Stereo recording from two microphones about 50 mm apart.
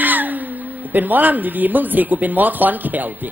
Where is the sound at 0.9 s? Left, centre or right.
Right.